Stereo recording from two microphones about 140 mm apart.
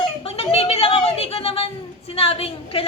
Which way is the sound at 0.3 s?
45° left (ahead or behind).